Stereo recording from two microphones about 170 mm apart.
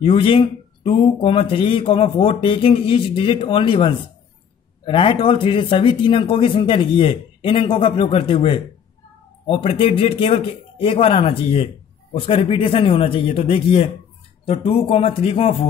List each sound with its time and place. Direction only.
0.0 s speech: 30° left (ahead or behind)